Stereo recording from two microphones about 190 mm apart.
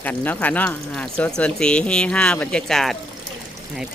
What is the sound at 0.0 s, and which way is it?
Speech, 10° left (ahead or behind).